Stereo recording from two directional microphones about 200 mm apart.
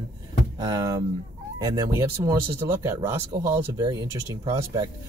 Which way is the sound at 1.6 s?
15° right (ahead or behind).